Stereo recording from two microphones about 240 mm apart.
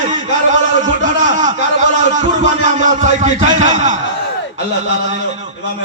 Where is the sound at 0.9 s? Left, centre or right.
Right.